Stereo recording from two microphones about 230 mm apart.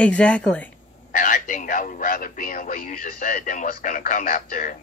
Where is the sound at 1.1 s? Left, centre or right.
Left.